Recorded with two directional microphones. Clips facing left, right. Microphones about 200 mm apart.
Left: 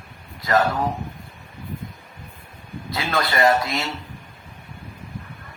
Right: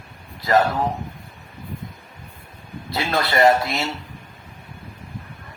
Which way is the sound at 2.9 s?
25° right (ahead or behind).